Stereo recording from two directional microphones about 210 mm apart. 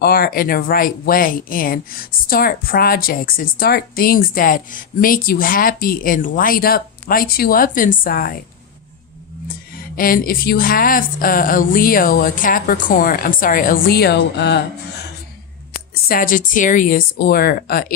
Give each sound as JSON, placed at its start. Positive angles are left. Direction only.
{"t": 0.0, "sound": "speech", "side_deg": 45}
{"t": 9.9, "sound": "speech", "side_deg": 40}
{"t": 16.0, "sound": "speech", "side_deg": 40}